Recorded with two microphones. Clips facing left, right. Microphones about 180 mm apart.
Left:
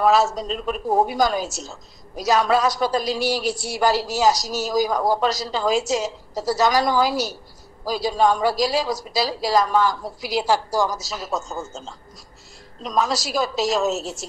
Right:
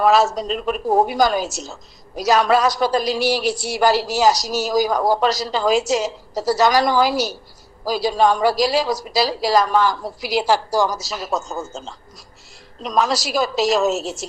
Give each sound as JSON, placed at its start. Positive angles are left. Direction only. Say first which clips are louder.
{"t": 0.0, "sound": "a woman's voice", "louder": "right 2 dB", "side_deg": -80}